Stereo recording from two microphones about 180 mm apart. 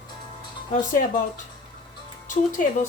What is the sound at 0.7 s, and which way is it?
Speech, 45° left (ahead or behind).